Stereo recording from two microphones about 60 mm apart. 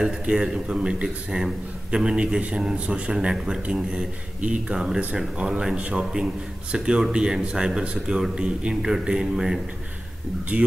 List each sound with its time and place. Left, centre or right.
0.0 s a man's voice: centre
4.8 s a man's voice: centre